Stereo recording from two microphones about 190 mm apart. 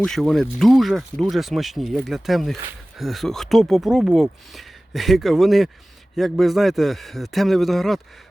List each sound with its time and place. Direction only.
0.0 s speech: centre (ahead or behind)